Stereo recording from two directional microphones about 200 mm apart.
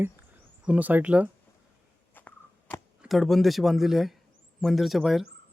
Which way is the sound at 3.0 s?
Centre (ahead or behind).